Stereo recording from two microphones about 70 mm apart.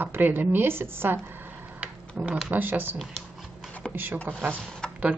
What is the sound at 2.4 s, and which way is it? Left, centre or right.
Speech, right.